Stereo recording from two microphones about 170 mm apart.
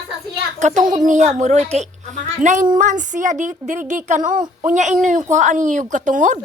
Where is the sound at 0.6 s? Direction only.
45° right (ahead or behind).